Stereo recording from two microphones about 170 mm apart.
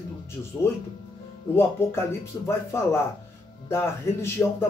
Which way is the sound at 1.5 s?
15° left (ahead or behind).